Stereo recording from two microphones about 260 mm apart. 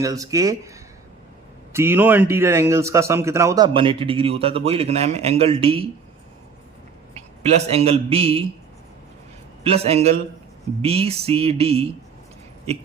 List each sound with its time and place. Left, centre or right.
0.0 s a man's voice: centre
1.7 s a man's voice: centre
7.1 s a man's voice: right
9.6 s speech: right